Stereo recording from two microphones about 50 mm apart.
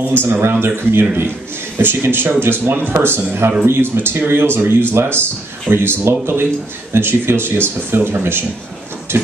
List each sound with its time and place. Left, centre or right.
0.1 s speech: right
1.8 s speech: right